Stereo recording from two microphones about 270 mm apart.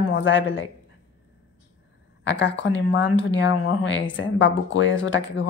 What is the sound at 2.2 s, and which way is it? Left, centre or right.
Speech, left.